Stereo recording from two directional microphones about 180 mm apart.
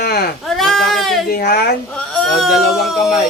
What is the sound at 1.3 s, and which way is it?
Speech, 60° left (ahead or behind).